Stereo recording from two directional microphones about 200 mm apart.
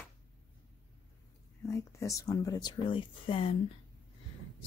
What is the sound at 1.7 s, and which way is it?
Speech, 15° left (ahead or behind).